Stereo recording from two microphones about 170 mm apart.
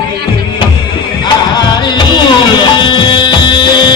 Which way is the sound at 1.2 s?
25° left (ahead or behind).